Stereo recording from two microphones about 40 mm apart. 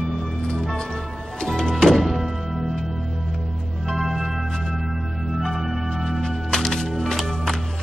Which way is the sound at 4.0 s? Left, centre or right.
Centre.